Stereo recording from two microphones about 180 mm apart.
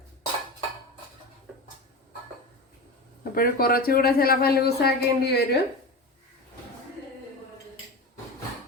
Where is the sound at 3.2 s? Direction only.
55° left (ahead or behind).